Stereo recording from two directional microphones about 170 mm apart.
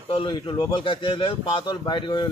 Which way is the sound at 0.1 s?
30° left (ahead or behind).